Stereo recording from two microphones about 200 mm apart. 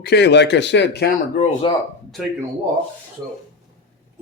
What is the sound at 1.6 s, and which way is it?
Speech, 25° left (ahead or behind).